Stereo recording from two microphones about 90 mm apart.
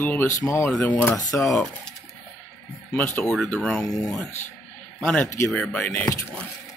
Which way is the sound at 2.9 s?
20° left (ahead or behind).